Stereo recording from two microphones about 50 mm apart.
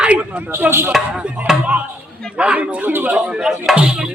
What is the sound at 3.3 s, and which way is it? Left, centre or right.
Speech, centre.